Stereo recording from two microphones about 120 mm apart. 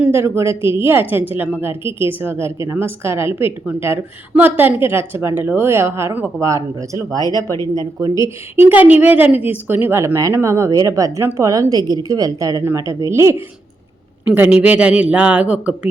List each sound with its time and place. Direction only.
0.0 s a woman's voice: 20° right (ahead or behind)
7.2 s speech: 30° left (ahead or behind)
7.9 s a woman's voice: 30° right (ahead or behind)
8.7 s a woman's voice: 15° right (ahead or behind)